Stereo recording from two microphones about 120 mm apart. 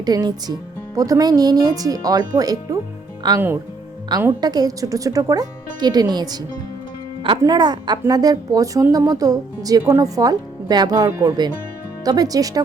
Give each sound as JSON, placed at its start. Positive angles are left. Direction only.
{"t": 0.0, "sound": "a woman's voice", "side_deg": -35}
{"t": 7.4, "sound": "a woman's voice", "side_deg": -35}